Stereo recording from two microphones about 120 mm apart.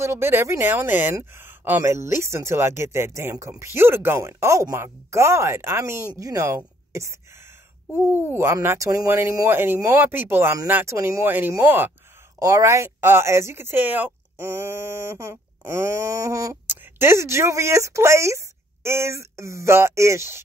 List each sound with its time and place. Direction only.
0.0 s speech: 20° right (ahead or behind)
12.4 s speech: 30° right (ahead or behind)